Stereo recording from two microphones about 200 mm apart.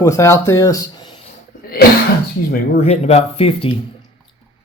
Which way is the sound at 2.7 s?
30° left (ahead or behind).